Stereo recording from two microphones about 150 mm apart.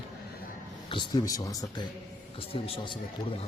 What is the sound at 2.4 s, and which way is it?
Speech, 35° left (ahead or behind).